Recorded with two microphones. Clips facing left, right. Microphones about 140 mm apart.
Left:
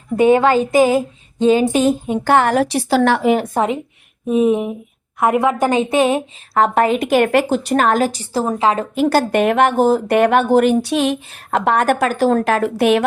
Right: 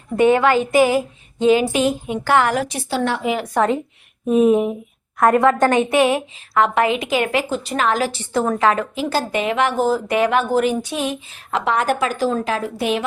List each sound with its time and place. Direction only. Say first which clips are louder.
0.2 s a woman's voice: left 2 dB; 15° left (ahead or behind)
1.7 s a woman's voice: left 4 dB; 40° left (ahead or behind)
2.6 s a woman's voice: left 7 dB; 80° left
3.2 s a woman's voice: left 6 dB; 55° left (ahead or behind)
4.3 s a woman's voice: right 1 dB; centre (ahead or behind); by 5.9 s 15° left (ahead or behind)
5.9 s a woman's voice: left 1 dB; 35° left (ahead or behind); by 7.6 s 60° left (ahead or behind)
7.7 s a woman's voice: left 3 dB; 45° left (ahead or behind); by 8.8 s 25° left (ahead or behind)
8.8 s speech: left 6 dB; 60° left (ahead or behind)
10.8 s speech: left 6 dB; 75° left (ahead or behind)